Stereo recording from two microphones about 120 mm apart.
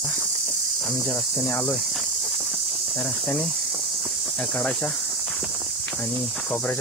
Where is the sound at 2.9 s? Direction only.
10° left (ahead or behind).